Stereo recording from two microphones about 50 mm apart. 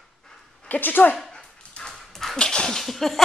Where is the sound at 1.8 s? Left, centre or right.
Left.